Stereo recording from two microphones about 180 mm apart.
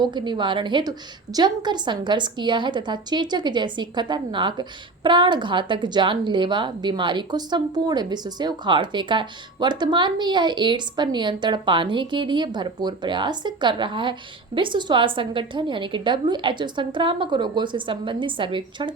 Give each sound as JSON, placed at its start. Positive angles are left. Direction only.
{"t": 0.0, "sound": "a woman's voice", "side_deg": -25}